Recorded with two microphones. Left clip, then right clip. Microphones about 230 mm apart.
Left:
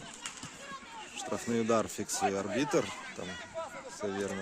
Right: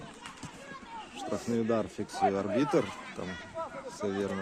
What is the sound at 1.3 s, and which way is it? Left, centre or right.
Speech, centre.